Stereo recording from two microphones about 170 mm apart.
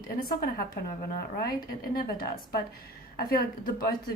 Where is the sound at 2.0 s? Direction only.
60° left (ahead or behind).